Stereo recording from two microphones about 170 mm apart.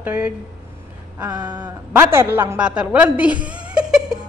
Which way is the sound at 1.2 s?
25° right (ahead or behind).